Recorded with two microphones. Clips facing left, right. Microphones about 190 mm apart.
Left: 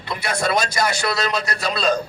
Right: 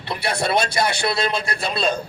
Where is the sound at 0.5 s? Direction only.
60° right (ahead or behind).